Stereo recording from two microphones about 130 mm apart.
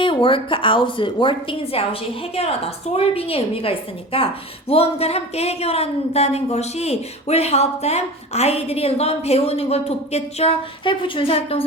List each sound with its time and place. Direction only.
0.0 s speech: 40° left (ahead or behind)